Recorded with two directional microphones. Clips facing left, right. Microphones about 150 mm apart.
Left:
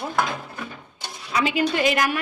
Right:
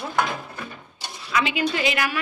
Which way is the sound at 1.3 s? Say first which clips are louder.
Left 2 dB; 40° left (ahead or behind).